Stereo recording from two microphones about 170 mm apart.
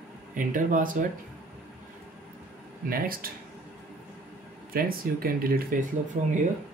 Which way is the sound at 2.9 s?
60° right (ahead or behind).